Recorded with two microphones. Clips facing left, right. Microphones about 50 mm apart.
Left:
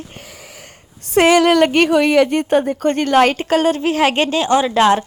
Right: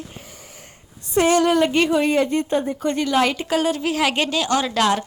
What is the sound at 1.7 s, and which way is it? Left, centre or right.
A woman's voice, left.